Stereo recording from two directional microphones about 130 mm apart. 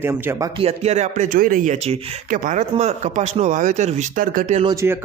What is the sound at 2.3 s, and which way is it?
Speech, 90° right.